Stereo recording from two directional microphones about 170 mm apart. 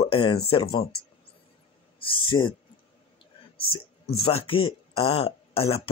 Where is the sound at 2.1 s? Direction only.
30° left (ahead or behind).